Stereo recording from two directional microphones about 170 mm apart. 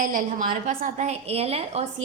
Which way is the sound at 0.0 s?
50° right (ahead or behind).